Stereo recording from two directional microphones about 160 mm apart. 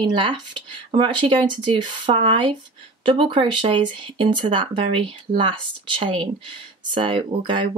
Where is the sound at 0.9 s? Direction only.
30° right (ahead or behind).